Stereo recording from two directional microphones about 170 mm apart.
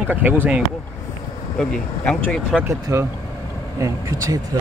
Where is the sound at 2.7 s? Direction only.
20° right (ahead or behind).